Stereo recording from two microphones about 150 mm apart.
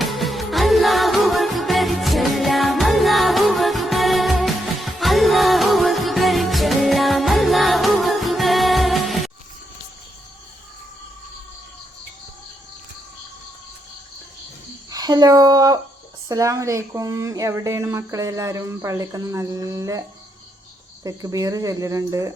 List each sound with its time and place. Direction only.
0.0 s music: centre (ahead or behind)
14.8 s a sound: 25° right (ahead or behind)
16.3 s speech: 20° right (ahead or behind)